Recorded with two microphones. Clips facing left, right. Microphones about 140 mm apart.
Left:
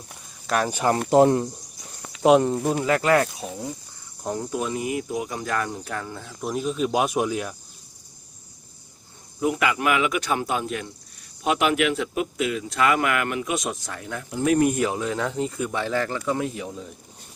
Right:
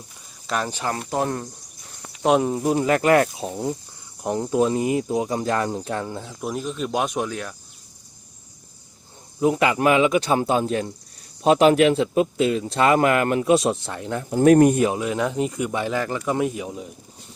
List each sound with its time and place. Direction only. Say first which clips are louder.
0.4 s speech: left 2 dB; 5° left (ahead or behind)
1.1 s speech: left 10 dB; 20° left (ahead or behind)
2.2 s speech: left 2 dB; centre (ahead or behind)
2.7 s speech: right 4 dB; 25° right (ahead or behind)
6.4 s speech: left 3 dB; centre (ahead or behind)
9.4 s speech: right 4 dB; 30° right (ahead or behind)
14.3 s speech: right 7 dB; 45° right (ahead or behind)
14.7 s speech: right 4 dB; 25° right (ahead or behind)